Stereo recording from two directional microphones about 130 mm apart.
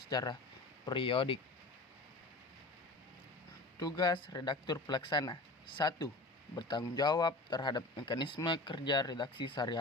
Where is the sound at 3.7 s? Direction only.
30° left (ahead or behind).